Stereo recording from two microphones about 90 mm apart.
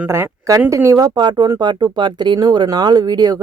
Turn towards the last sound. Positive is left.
turn(degrees=-45)  # may be behind; listen again after turning